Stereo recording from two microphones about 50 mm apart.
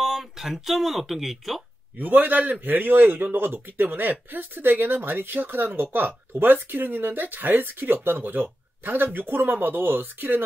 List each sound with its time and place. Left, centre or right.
0.0 s speech: centre
2.0 s a man's voice: right